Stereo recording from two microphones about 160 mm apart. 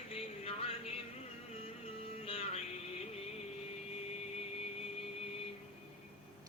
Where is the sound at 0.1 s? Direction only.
40° left (ahead or behind).